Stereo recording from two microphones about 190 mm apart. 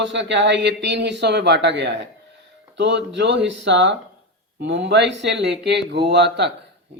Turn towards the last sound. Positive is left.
turn(degrees=-65)  # may be behind; listen again after turning